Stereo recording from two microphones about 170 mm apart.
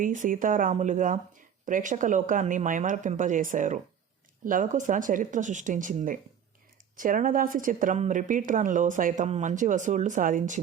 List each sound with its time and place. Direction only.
0.0 s a woman's voice: 50° right (ahead or behind)